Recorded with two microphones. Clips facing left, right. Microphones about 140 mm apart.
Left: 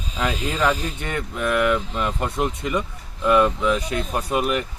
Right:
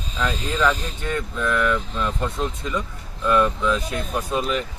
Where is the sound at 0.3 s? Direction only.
10° left (ahead or behind).